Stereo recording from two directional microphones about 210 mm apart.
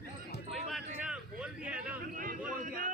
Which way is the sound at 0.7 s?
5° right (ahead or behind).